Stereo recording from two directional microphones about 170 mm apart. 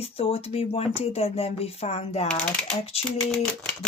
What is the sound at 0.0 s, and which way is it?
Speech, 35° left (ahead or behind).